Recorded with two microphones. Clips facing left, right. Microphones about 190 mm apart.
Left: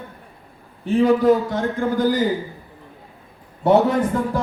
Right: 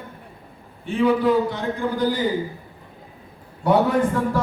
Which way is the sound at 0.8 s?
40° left (ahead or behind).